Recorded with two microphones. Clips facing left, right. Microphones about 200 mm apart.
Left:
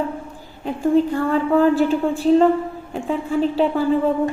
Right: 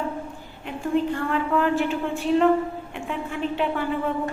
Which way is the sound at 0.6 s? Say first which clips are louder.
Left 7 dB; 35° left (ahead or behind).